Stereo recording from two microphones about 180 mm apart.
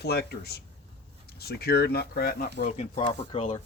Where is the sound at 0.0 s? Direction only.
60° left (ahead or behind).